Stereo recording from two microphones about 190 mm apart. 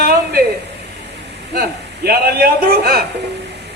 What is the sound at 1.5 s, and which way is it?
A man's voice, 55° right (ahead or behind).